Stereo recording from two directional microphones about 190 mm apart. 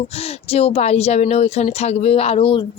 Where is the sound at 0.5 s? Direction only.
30° left (ahead or behind).